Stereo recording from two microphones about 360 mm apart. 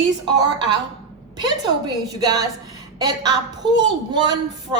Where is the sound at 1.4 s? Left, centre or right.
Centre.